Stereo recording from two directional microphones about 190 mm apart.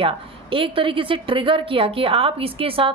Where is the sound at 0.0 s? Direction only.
30° right (ahead or behind).